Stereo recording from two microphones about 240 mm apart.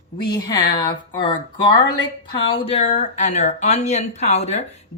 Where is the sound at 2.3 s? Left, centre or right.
Left.